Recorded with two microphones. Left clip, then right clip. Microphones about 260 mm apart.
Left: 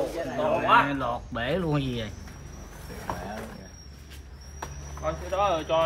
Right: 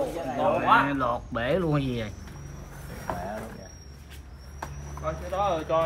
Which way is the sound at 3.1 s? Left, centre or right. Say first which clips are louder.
Right 1 dB; centre.